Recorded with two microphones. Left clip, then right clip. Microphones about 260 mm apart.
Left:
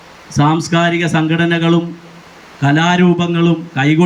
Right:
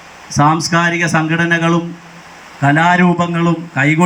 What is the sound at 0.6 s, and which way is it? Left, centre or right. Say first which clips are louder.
Speech: right 1 dB; centre.